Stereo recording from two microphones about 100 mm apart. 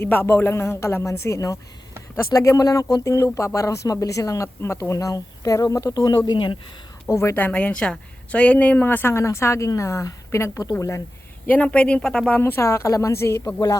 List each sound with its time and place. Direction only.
0.0 s a woman's voice: 20° left (ahead or behind)
6.3 s speech: 50° left (ahead or behind)
7.1 s a woman's voice: 30° left (ahead or behind)
7.3 s a woman's voice: 15° left (ahead or behind); by 11.0 s 30° left (ahead or behind)
11.4 s speech: 15° left (ahead or behind)
12.4 s a woman's voice: 25° left (ahead or behind)